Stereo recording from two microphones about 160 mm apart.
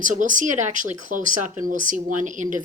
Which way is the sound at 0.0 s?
55° right (ahead or behind).